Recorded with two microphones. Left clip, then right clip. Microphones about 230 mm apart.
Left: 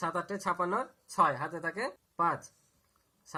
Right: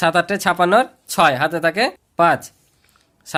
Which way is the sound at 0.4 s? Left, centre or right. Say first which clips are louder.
Right 16 dB; right.